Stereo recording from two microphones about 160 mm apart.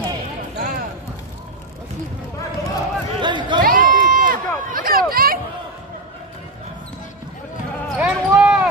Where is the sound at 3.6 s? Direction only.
60° right (ahead or behind).